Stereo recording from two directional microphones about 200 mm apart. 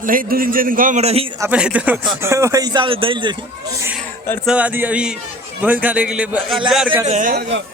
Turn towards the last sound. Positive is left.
turn(degrees=-35)  # may be behind; listen again after turning